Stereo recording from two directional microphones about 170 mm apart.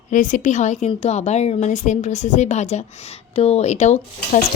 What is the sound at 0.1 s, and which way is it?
A woman's voice, 50° left (ahead or behind).